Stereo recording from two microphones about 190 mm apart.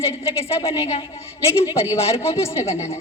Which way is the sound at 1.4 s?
15° left (ahead or behind).